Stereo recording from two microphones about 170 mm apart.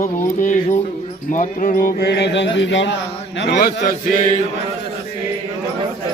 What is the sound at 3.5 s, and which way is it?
Speech, 60° left (ahead or behind).